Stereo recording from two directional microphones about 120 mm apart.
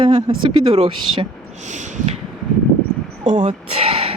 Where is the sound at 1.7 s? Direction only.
75° right (ahead or behind).